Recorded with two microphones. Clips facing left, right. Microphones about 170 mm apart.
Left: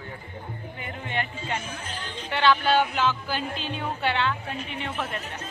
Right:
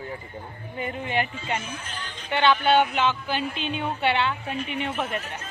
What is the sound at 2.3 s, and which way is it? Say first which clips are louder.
Speech: right 1 dB; centre (ahead or behind).